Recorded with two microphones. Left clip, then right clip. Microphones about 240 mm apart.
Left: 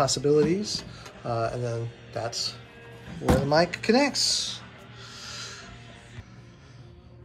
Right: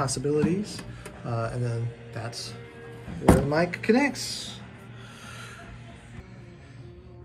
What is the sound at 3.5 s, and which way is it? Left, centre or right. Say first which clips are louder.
Speech: left 2 dB; centre.